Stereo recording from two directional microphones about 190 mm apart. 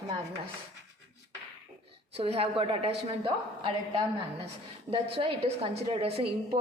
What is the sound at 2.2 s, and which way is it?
A woman's voice, 30° right (ahead or behind).